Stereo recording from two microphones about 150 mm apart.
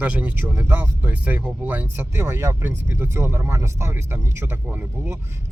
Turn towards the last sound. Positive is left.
turn(degrees=-15)  # may be behind; listen again after turning